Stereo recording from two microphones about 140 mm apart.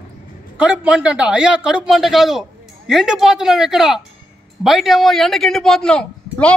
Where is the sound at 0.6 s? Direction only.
10° right (ahead or behind).